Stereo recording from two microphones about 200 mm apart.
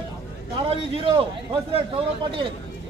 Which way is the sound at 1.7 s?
25° right (ahead or behind).